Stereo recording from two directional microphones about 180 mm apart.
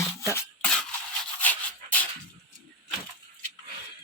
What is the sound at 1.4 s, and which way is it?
Dog, 10° left (ahead or behind).